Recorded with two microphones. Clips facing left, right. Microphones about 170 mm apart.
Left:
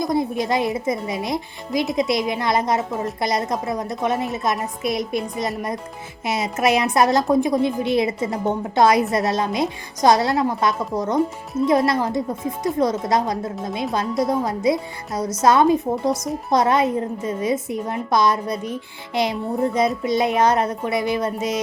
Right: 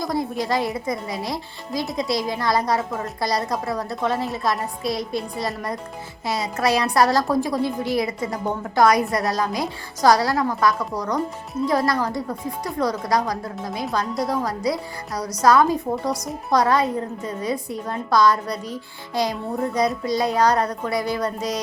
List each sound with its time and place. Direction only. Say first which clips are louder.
0.0 s a woman's voice: left 3 dB; 20° left (ahead or behind)